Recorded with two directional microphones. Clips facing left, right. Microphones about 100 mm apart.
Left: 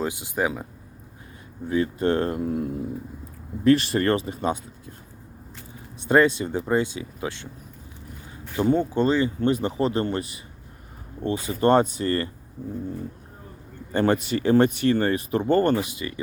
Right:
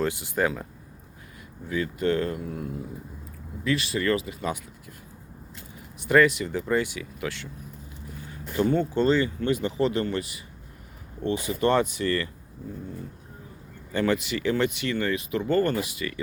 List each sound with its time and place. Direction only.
0.0 s speech: 15° left (ahead or behind)
1.6 s speech: 30° left (ahead or behind)
6.1 s speech: 25° left (ahead or behind)
8.5 s speech: 15° left (ahead or behind)
9.2 s speech: 30° left (ahead or behind)
13.9 s speech: 40° left (ahead or behind); by 16.2 s 25° left (ahead or behind)